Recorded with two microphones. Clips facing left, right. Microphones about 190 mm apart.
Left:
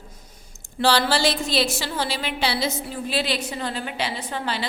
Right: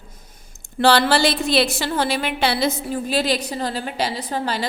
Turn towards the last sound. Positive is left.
turn(degrees=-40)  # may be behind; listen again after turning